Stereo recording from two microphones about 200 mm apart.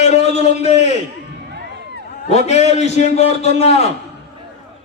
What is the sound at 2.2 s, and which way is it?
A man's voice, 35° left (ahead or behind).